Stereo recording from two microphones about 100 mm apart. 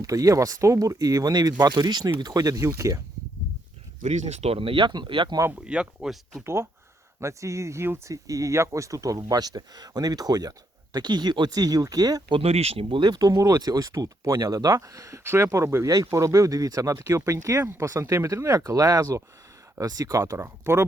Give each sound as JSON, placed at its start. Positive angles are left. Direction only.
{"t": 0.0, "sound": "speech", "side_deg": -35}
{"t": 4.3, "sound": "speech", "side_deg": -90}
{"t": 5.5, "sound": "speech", "side_deg": -10}
{"t": 6.4, "sound": "speech", "side_deg": -25}
{"t": 12.3, "sound": "speech", "side_deg": -80}